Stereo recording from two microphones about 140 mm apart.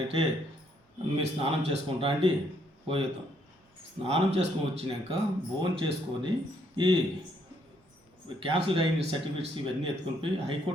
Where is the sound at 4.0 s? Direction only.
45° right (ahead or behind).